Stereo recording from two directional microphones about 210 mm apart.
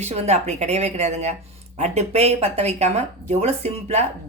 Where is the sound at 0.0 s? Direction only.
30° right (ahead or behind).